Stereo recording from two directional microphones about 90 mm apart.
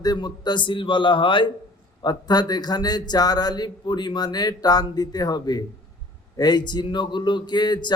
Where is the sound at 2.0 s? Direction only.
50° left (ahead or behind).